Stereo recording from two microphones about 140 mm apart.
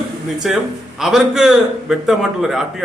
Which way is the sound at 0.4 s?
5° right (ahead or behind).